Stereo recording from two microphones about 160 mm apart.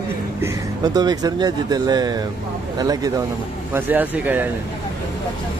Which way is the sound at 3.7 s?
10° right (ahead or behind).